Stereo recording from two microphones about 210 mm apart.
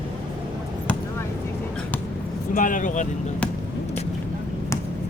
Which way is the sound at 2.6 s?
40° left (ahead or behind).